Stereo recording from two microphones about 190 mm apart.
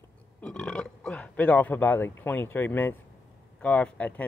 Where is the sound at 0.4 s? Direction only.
5° left (ahead or behind).